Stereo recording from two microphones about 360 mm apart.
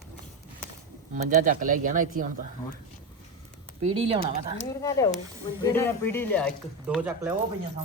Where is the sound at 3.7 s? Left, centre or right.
Centre.